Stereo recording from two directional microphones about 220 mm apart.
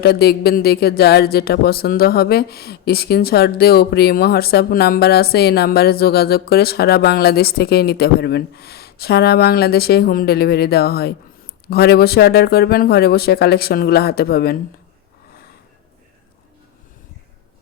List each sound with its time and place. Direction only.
0.0 s speech: 45° left (ahead or behind)